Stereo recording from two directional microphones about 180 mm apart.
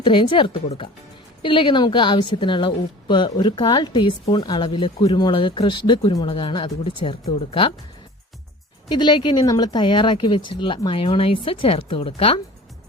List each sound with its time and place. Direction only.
0.0 s speech: 25° left (ahead or behind)
9.0 s speech: 25° left (ahead or behind)